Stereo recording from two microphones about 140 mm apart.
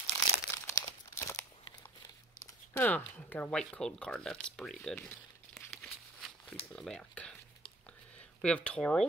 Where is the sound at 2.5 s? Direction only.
15° left (ahead or behind).